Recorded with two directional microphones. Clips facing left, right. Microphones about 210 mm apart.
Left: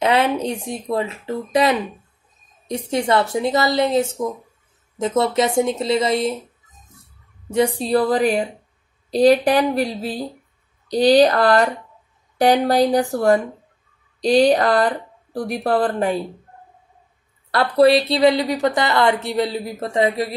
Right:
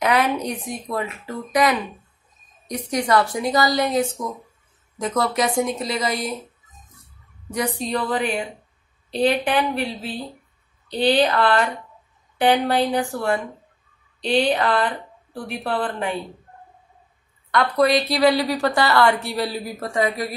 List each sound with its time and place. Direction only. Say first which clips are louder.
0.0 s a woman's voice: left 2 dB; 25° left (ahead or behind)
7.4 s speech: left 6 dB; 25° left (ahead or behind)
17.5 s a woman's voice: left 4 dB; 30° left (ahead or behind)